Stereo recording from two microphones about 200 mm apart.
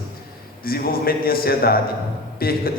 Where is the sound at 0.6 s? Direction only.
50° left (ahead or behind).